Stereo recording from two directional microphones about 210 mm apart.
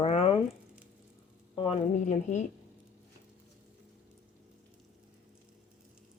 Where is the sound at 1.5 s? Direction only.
25° left (ahead or behind).